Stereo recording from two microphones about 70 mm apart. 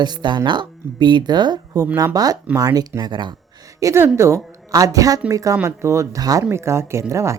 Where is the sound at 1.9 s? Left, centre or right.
Right.